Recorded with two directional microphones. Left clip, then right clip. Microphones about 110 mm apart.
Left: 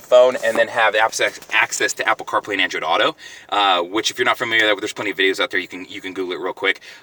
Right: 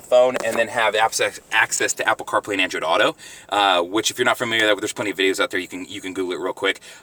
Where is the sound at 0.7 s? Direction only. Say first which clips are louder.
Left 2 dB; 20° right (ahead or behind).